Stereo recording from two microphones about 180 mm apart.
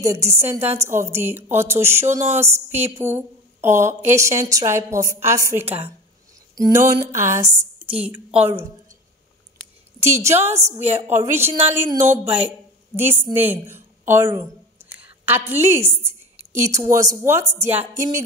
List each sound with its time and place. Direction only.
0.0 s a woman's voice: 15° right (ahead or behind)
6.5 s a sound: 15° right (ahead or behind)
7.8 s a woman's voice: 10° right (ahead or behind)
9.9 s a woman's voice: 15° right (ahead or behind)